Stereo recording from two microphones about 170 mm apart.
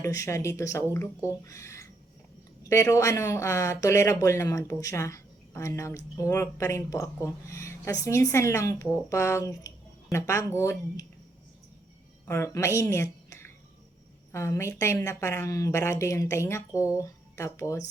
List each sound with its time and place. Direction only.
0.0 s speech: 15° left (ahead or behind)
12.2 s a woman's voice: 15° left (ahead or behind)